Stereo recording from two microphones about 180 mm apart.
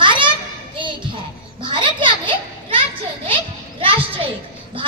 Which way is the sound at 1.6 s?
25° right (ahead or behind).